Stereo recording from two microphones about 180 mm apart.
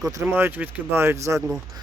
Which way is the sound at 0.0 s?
20° right (ahead or behind).